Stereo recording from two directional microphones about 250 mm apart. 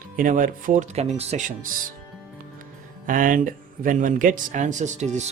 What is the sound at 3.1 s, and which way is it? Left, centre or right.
Speech, right.